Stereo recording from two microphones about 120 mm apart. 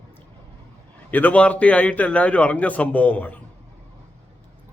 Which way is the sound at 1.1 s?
10° left (ahead or behind).